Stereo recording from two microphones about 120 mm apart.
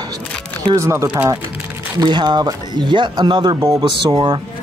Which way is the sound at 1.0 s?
10° right (ahead or behind).